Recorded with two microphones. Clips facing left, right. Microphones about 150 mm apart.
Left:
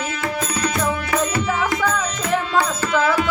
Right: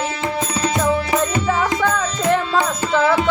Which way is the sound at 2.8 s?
25° right (ahead or behind).